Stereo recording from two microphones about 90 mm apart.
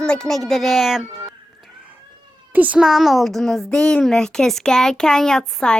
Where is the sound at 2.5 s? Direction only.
20° right (ahead or behind).